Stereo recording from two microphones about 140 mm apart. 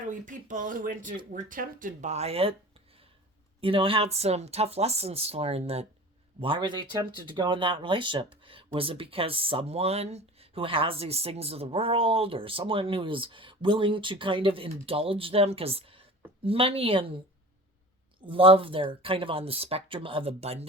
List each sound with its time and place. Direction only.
0.0 s speech: 65° right (ahead or behind); by 2.6 s 45° right (ahead or behind)
3.6 s speech: 40° right (ahead or behind)
18.3 s speech: 40° right (ahead or behind)